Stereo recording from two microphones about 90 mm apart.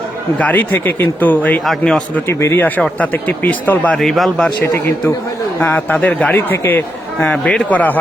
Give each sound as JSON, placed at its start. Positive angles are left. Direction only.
{"t": 0.3, "sound": "speech", "side_deg": 20}
{"t": 1.8, "sound": "speech", "side_deg": 5}
{"t": 2.3, "sound": "speech", "side_deg": 30}
{"t": 2.6, "sound": "speech", "side_deg": 20}
{"t": 3.9, "sound": "a man's voice", "side_deg": 0}
{"t": 4.6, "sound": "speech", "side_deg": 25}
{"t": 7.3, "sound": "speech", "side_deg": 10}